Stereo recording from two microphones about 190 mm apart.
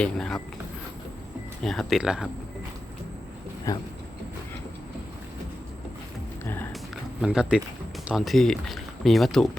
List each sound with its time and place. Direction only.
0.0 s speech: 5° left (ahead or behind)
1.6 s speech: centre (ahead or behind)
3.7 s speech: 15° left (ahead or behind)
6.4 s music: 10° left (ahead or behind)
7.2 s speech: 5° right (ahead or behind)